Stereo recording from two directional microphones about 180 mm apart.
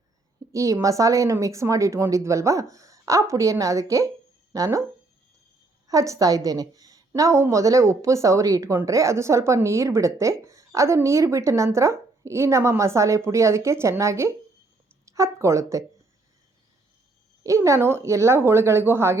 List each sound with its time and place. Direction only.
0.5 s a woman's voice: 15° right (ahead or behind)
5.9 s a woman's voice: 20° right (ahead or behind)
17.4 s a woman's voice: 15° right (ahead or behind)